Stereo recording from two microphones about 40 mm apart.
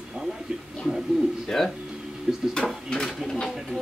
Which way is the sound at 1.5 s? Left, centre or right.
Centre.